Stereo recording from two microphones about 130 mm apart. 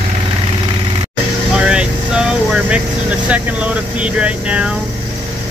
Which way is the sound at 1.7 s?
5° right (ahead or behind).